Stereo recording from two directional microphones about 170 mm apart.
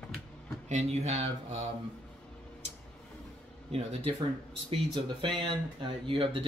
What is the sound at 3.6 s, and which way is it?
Speech, 35° right (ahead or behind).